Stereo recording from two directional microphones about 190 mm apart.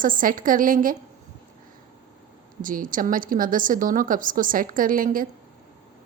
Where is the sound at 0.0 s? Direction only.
45° right (ahead or behind).